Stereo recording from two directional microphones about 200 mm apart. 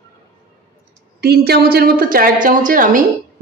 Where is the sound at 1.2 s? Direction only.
50° right (ahead or behind).